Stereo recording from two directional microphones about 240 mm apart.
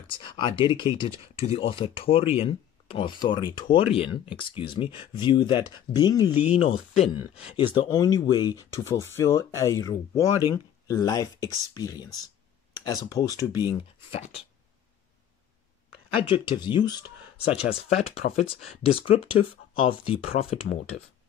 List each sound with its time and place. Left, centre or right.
0.1 s speech: left
16.2 s speech: left